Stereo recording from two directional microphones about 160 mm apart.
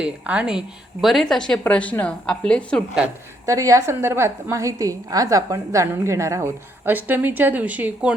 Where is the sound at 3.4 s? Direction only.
20° right (ahead or behind).